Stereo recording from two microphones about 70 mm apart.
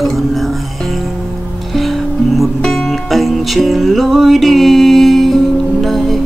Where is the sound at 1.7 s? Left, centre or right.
Centre.